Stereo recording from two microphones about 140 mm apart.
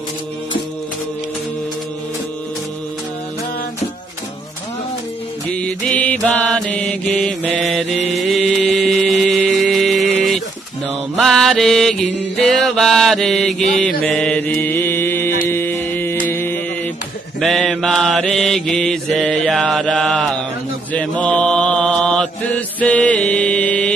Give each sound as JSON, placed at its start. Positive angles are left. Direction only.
{"t": 5.5, "sound": "mantra", "side_deg": 5}
{"t": 10.1, "sound": "bird", "side_deg": 0}
{"t": 11.1, "sound": "mantra", "side_deg": 0}
{"t": 17.4, "sound": "mantra", "side_deg": 0}